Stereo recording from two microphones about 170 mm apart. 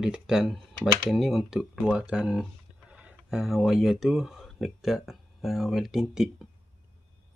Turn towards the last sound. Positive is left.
turn(degrees=-5)  # may be behind; listen again after turning